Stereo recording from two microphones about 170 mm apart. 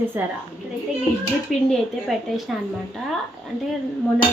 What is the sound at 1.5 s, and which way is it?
Speech, centre (ahead or behind).